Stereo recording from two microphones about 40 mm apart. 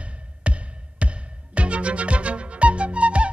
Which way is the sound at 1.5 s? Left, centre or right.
Right.